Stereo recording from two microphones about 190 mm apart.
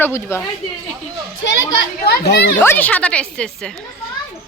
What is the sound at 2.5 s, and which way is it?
Speech, 10° left (ahead or behind).